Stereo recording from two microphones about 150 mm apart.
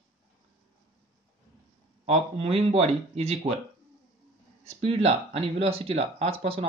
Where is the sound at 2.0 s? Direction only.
40° right (ahead or behind).